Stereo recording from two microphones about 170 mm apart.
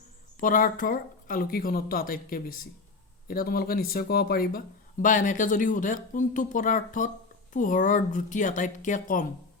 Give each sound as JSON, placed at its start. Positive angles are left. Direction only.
{"t": 0.3, "sound": "speech", "side_deg": 50}